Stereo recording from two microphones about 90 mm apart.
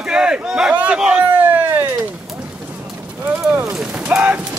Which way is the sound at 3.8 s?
15° right (ahead or behind).